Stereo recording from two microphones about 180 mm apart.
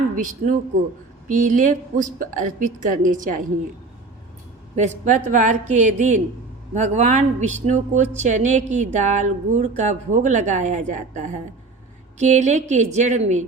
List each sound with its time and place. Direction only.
0.2 s a woman's voice: 45° right (ahead or behind)
4.7 s a woman's voice: 40° right (ahead or behind)